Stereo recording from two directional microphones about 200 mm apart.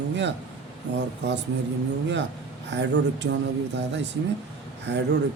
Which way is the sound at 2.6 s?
60° right (ahead or behind).